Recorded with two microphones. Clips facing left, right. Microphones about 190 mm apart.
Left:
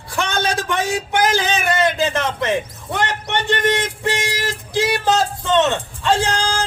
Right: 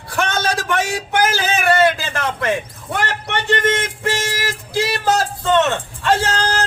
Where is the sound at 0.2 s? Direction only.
15° left (ahead or behind).